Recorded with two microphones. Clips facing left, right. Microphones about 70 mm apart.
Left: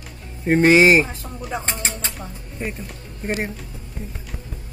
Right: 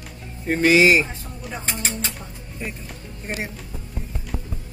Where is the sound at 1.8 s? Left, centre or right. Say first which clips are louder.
Even; left.